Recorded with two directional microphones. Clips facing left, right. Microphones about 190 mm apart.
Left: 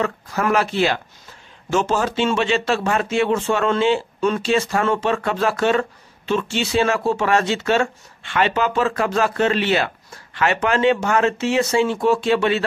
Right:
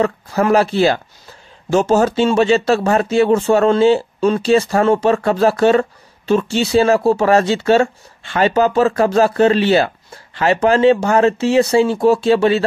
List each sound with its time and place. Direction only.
0.0 s speech: 30° right (ahead or behind)